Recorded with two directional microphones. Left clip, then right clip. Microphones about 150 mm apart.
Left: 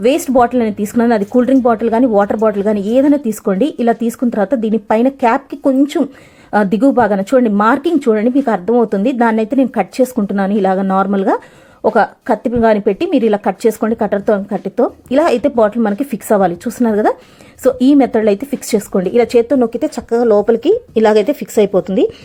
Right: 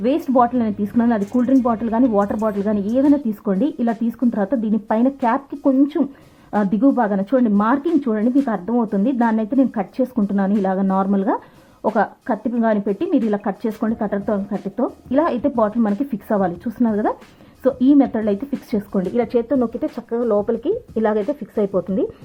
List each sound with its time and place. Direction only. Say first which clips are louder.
0.0 s speech: left 5 dB; 20° left (ahead or behind)